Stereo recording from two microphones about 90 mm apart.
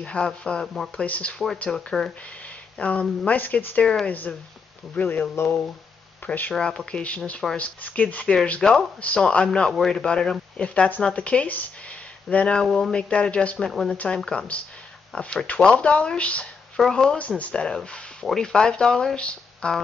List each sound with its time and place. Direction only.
0.0 s speech: 10° left (ahead or behind)
3.8 s speech: 5° left (ahead or behind)
4.1 s speech: 20° left (ahead or behind)
6.5 s speech: 5° left (ahead or behind)